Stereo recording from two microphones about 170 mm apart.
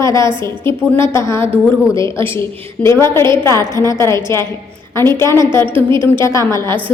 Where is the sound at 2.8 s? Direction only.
15° left (ahead or behind).